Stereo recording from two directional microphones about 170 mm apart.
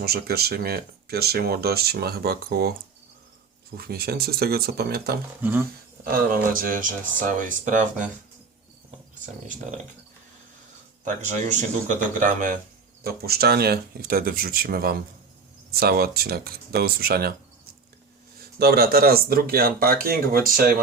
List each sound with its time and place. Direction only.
0.0 s speech: 65° right (ahead or behind)
3.8 s speech: 65° right (ahead or behind)
5.4 s speech: 10° right (ahead or behind)
6.1 s speech: 55° right (ahead or behind)
11.2 s speech: 45° right (ahead or behind)
13.0 s speech: 65° right (ahead or behind)
18.3 s speech: 65° right (ahead or behind)